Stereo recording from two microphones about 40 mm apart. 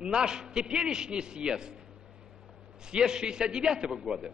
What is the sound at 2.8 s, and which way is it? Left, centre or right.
A man's voice, centre.